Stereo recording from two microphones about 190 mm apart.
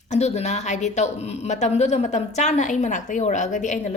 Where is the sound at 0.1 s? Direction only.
35° left (ahead or behind).